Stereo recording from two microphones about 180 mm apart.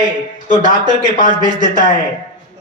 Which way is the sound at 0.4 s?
45° left (ahead or behind).